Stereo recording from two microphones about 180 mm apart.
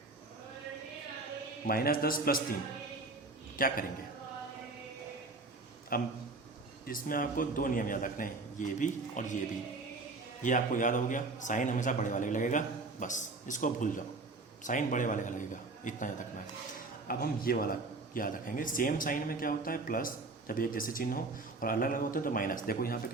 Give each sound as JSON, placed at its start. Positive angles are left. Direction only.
{"t": 1.6, "sound": "a man's voice", "side_deg": 55}
{"t": 3.6, "sound": "a man's voice", "side_deg": 50}
{"t": 5.9, "sound": "a man's voice", "side_deg": 55}
{"t": 10.4, "sound": "a man's voice", "side_deg": 45}
{"t": 17.1, "sound": "a man's voice", "side_deg": 55}